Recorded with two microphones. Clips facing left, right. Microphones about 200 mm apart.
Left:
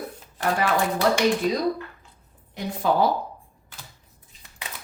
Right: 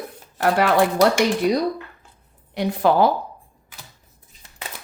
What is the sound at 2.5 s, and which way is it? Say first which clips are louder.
Speech: right 5 dB; 70° right (ahead or behind).